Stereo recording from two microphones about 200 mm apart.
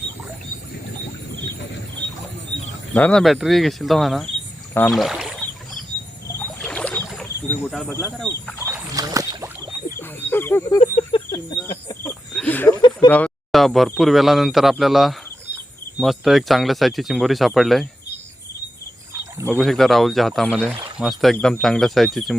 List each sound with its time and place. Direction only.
2.9 s speech: 5° left (ahead or behind)
4.9 s rowboat: centre (ahead or behind)
6.6 s rowboat: 5° left (ahead or behind)
7.9 s speech: 10° left (ahead or behind)
8.6 s rowboat: 15° right (ahead or behind)
10.0 s speech: 10° left (ahead or behind)
10.8 s a sound: 30° left (ahead or behind)
11.3 s speech: 20° left (ahead or behind)
12.3 s a sound: 5° left (ahead or behind)
13.1 s speech: 5° left (ahead or behind)
19.1 s a sound: 15° right (ahead or behind)
19.5 s speech: centre (ahead or behind)